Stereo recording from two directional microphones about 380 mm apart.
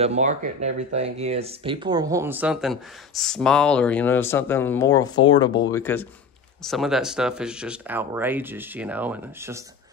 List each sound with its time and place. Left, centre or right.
0.0 s speech: centre